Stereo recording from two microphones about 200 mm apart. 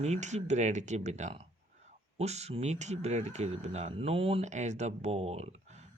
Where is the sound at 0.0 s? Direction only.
35° right (ahead or behind).